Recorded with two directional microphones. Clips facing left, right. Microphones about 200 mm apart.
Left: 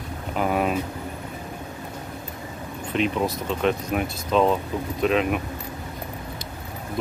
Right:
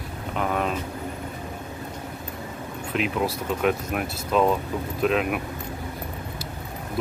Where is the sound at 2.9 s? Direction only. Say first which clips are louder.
Left 2 dB; 5° right (ahead or behind).